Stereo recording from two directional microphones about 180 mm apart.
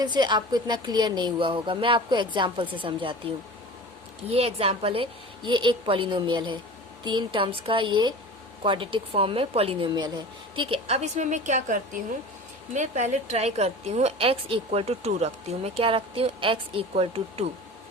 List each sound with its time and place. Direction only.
0.0 s a woman's voice: 25° right (ahead or behind)
4.3 s a woman's voice: 35° right (ahead or behind)